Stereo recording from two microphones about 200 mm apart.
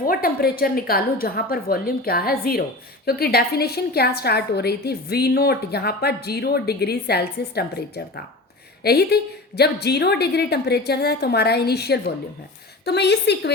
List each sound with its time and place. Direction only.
0.0 s a woman's voice: 45° left (ahead or behind)